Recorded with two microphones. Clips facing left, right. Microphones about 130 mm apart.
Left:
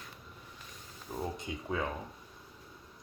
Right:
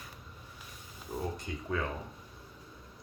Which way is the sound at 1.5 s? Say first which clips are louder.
Even; 15° left (ahead or behind).